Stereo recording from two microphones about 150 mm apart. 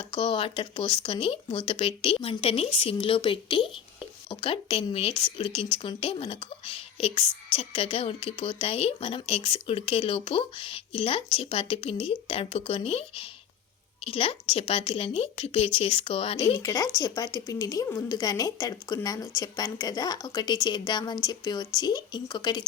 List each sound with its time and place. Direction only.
0.0 s speech: 35° left (ahead or behind)
16.6 s a woman's voice: 25° left (ahead or behind)